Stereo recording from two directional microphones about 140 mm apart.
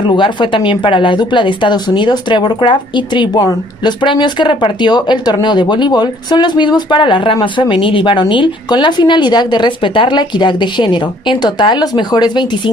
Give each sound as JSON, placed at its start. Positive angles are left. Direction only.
{"t": 0.0, "sound": "speech", "side_deg": 35}